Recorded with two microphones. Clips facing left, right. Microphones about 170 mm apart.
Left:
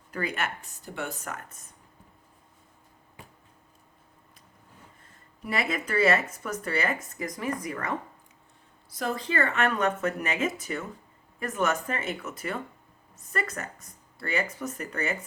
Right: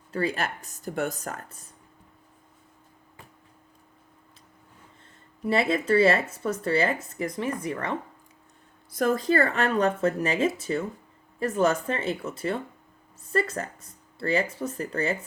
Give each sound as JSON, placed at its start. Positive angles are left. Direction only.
{"t": 0.1, "sound": "speech", "side_deg": -30}
{"t": 5.5, "sound": "speech", "side_deg": -30}
{"t": 8.9, "sound": "speech", "side_deg": -50}